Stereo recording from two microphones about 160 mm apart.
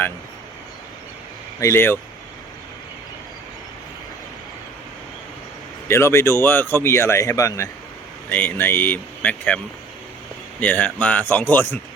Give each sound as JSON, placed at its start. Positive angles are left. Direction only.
{"t": 1.5, "sound": "a man's voice", "side_deg": 15}
{"t": 5.9, "sound": "a man's voice", "side_deg": 15}
{"t": 10.6, "sound": "a man's voice", "side_deg": 10}